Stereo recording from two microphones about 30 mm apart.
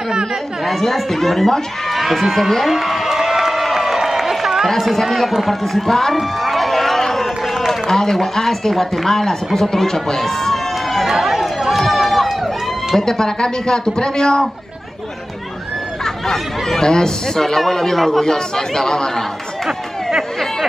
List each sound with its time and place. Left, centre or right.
0.7 s speech: centre
2.7 s crowd: centre
4.6 s speech: centre
6.1 s a sound: centre
7.1 s run: centre
8.0 s speech: centre
9.8 s run: centre
11.1 s chatter: centre
11.4 s run: centre
13.0 s speech: left
16.0 s speech: centre
16.8 s speech: left
17.4 s speech: centre
18.2 s speech: left